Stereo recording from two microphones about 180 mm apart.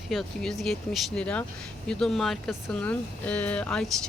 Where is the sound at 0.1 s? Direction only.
Centre (ahead or behind).